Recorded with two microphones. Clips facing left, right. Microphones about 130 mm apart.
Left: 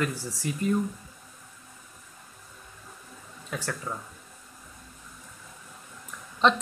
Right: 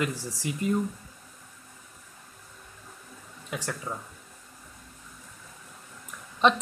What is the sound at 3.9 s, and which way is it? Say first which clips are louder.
Speech: even; 20° right (ahead or behind).